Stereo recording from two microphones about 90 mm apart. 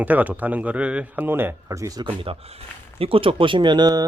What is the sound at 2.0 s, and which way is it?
Speech, 80° right.